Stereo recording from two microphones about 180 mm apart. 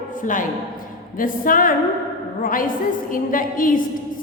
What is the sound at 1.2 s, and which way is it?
A woman's voice, 50° left (ahead or behind).